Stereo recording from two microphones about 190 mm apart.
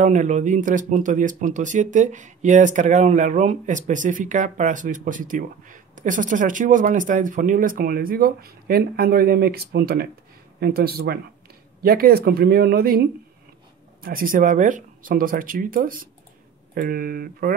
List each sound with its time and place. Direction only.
0.0 s speech: 40° right (ahead or behind)